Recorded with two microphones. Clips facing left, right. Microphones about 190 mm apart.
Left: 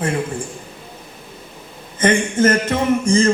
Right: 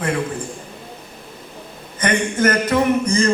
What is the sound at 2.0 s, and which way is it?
A man's voice, 25° left (ahead or behind).